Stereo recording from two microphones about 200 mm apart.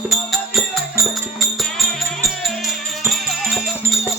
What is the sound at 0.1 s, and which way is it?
Music, centre (ahead or behind).